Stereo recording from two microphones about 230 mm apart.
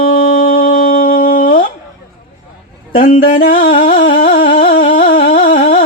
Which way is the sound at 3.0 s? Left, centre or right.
Left.